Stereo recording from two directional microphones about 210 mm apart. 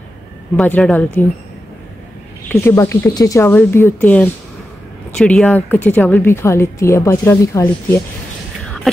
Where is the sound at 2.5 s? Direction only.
10° left (ahead or behind).